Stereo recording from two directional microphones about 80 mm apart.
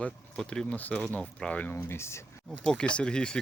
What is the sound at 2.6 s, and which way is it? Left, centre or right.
Speech, centre.